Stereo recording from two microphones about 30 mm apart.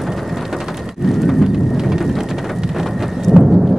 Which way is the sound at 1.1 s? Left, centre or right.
Centre.